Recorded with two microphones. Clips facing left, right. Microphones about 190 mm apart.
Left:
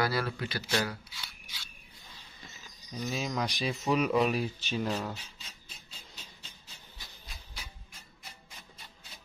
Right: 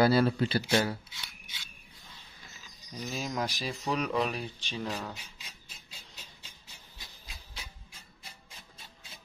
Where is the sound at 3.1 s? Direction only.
Centre (ahead or behind).